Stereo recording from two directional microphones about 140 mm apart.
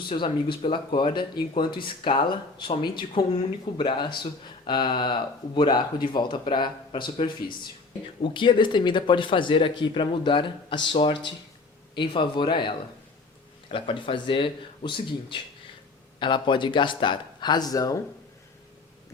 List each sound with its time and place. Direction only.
0.1 s speech: 35° left (ahead or behind)